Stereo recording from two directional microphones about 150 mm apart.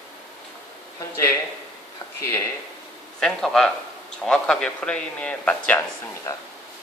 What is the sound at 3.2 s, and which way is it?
A man's voice, 5° left (ahead or behind).